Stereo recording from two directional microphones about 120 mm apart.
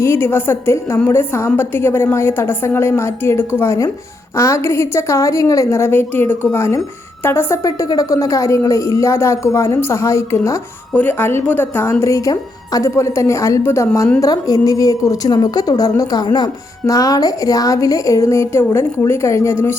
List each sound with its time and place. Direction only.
0.0 s a woman's voice: 20° left (ahead or behind)